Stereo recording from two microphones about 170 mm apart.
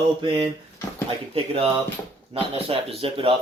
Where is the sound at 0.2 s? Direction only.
30° right (ahead or behind).